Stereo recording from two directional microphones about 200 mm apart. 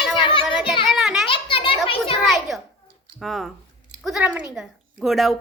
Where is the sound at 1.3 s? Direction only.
25° left (ahead or behind).